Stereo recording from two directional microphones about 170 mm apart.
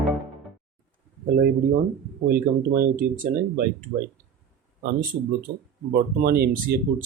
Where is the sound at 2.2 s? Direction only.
60° right (ahead or behind).